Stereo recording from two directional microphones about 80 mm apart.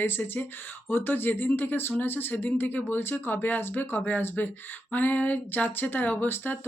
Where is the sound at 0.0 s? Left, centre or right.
Left.